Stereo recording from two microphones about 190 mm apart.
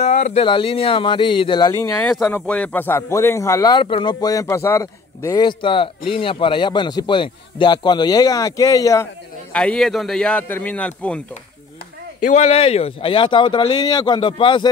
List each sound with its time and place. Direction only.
0.0 s a man's voice: 35° left (ahead or behind)
2.0 s a man's voice: 5° left (ahead or behind)
9.5 s a man's voice: 5° left (ahead or behind)
12.2 s a man's voice: 40° left (ahead or behind)